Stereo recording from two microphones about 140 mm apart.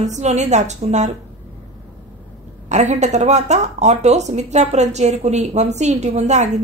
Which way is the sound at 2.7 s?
55° right (ahead or behind).